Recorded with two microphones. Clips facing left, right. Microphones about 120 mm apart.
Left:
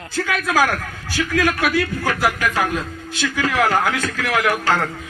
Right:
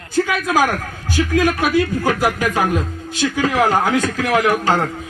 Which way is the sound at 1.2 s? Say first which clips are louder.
Right 4 dB; 25° right (ahead or behind).